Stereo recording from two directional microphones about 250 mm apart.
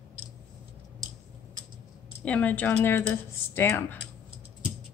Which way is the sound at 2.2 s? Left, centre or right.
Centre.